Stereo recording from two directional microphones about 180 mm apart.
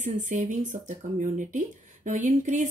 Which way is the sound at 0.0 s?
45° right (ahead or behind).